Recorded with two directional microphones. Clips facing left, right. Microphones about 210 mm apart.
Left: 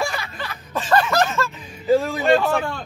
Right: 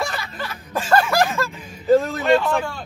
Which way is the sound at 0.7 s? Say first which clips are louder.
Right 1 dB; 10° right (ahead or behind).